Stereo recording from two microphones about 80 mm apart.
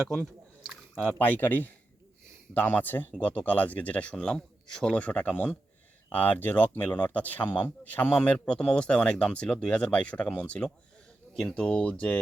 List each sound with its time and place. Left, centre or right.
0.3 s chewing: centre
1.0 s speech: left